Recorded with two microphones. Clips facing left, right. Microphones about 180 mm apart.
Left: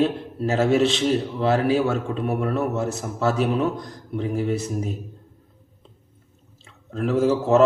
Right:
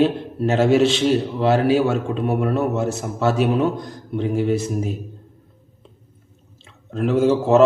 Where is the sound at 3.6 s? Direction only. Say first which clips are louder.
Right 3 dB; 30° right (ahead or behind).